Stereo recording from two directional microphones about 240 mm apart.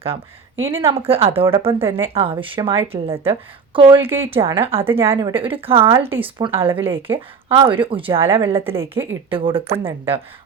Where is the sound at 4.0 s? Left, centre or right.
Centre.